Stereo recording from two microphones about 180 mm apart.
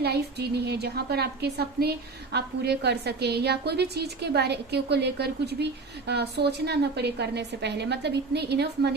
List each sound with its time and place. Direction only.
0.0 s a woman's voice: 65° right (ahead or behind)